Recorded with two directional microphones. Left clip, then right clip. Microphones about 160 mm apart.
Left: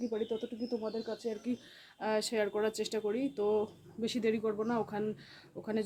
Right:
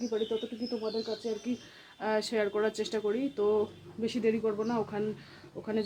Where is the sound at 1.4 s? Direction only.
5° left (ahead or behind).